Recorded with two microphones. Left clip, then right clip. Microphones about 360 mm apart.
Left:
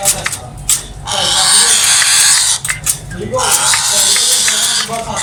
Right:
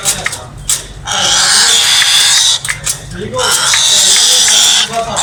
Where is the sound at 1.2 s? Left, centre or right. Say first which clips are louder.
Right 2 dB; centre.